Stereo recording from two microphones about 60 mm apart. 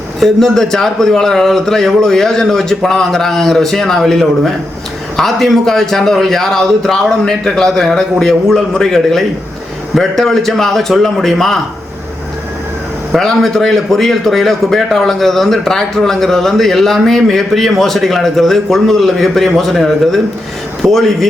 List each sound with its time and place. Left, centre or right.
0.2 s a man's voice: centre
13.1 s a man's voice: centre